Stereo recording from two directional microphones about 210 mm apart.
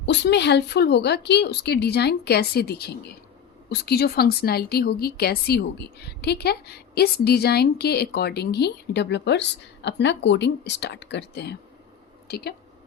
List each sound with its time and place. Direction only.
0.0 s speech: 55° left (ahead or behind)